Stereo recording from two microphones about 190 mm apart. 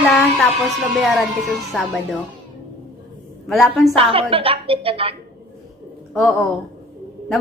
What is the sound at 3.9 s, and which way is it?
A woman's voice, 30° right (ahead or behind).